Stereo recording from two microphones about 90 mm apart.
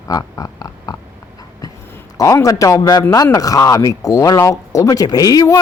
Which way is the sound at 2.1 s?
40° left (ahead or behind).